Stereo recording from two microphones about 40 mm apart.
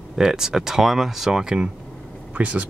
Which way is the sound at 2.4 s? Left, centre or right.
Right.